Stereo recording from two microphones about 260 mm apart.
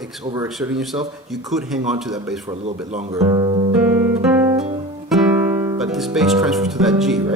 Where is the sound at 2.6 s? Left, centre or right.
Right.